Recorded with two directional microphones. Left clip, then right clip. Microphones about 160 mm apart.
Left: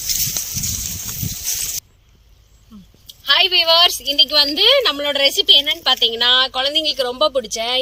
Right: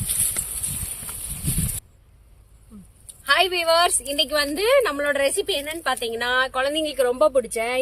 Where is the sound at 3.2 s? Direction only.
Centre (ahead or behind).